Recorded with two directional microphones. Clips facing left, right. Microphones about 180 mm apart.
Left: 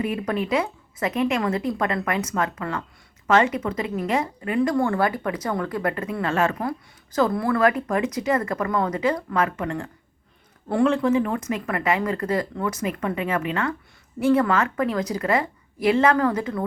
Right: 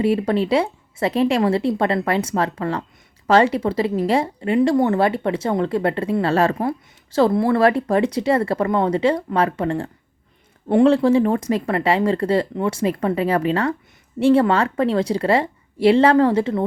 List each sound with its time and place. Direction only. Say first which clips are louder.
0.0 s speech: right 7 dB; 30° right (ahead or behind)